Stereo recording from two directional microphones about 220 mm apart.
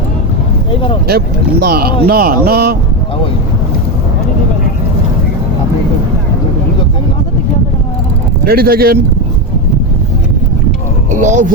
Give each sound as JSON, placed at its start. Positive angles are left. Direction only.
{"t": 0.7, "sound": "speech", "side_deg": 25}
{"t": 1.0, "sound": "speech", "side_deg": -45}
{"t": 8.4, "sound": "speech", "side_deg": -45}
{"t": 11.1, "sound": "speech", "side_deg": -35}